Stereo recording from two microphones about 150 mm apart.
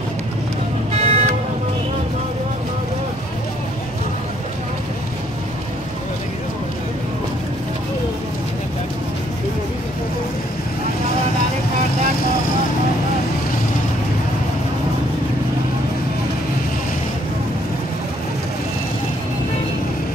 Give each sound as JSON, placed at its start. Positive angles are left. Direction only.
{"t": 0.9, "sound": "vehicle", "side_deg": -45}